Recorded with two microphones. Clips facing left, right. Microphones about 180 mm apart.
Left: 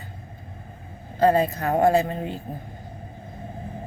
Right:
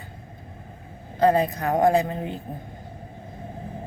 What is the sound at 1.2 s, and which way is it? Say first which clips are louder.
Speech: even; 15° right (ahead or behind).